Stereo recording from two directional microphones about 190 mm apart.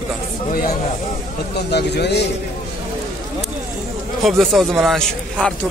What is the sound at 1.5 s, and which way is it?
Speech, 60° left (ahead or behind).